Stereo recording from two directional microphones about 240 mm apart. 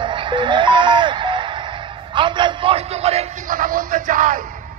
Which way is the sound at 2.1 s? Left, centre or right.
Centre.